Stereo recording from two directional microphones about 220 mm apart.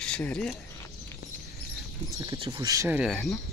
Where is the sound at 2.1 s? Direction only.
15° right (ahead or behind); by 3.3 s centre (ahead or behind).